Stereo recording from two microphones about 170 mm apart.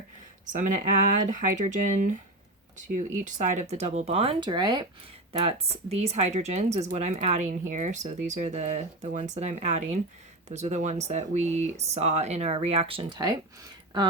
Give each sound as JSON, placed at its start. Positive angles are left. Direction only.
{"t": 0.5, "sound": "speech", "side_deg": -50}
{"t": 3.2, "sound": "speech", "side_deg": -45}
{"t": 5.3, "sound": "speech", "side_deg": -35}